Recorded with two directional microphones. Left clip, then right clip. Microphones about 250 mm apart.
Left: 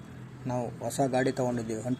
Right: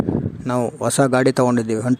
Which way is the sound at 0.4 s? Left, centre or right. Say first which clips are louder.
Right 11 dB; right.